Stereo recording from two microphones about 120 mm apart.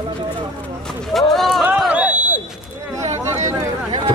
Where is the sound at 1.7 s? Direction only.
10° right (ahead or behind).